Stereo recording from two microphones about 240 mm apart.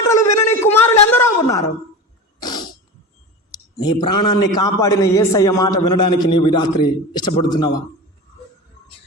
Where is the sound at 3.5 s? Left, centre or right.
Centre.